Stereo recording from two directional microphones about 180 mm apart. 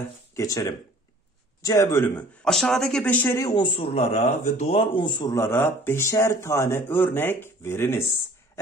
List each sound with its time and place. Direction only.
0.4 s speech: 20° left (ahead or behind)
2.4 s speech: centre (ahead or behind)